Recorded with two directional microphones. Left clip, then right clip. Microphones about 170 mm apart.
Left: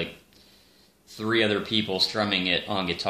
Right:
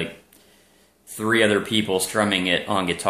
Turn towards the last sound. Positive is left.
turn(degrees=-20)  # may be behind; listen again after turning